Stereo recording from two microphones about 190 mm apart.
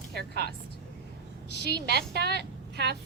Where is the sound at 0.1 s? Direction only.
55° right (ahead or behind).